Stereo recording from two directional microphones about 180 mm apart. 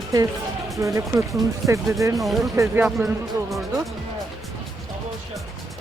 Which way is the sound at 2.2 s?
Centre (ahead or behind).